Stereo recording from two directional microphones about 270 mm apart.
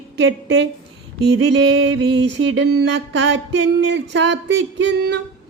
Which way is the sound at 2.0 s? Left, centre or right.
Right.